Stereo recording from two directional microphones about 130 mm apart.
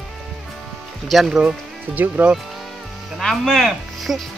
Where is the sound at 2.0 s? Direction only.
10° right (ahead or behind).